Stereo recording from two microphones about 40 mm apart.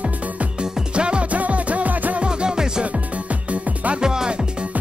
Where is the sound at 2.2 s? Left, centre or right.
Right.